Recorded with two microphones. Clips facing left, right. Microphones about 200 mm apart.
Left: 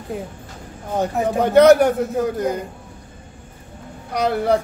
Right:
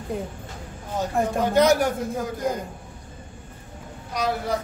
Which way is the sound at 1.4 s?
60° left (ahead or behind).